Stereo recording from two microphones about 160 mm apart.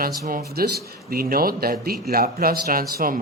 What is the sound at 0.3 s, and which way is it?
Speech, 65° right (ahead or behind).